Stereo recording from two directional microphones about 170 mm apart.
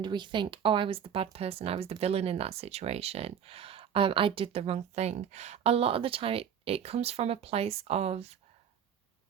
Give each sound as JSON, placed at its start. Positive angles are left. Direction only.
{"t": 0.0, "sound": "speech", "side_deg": -25}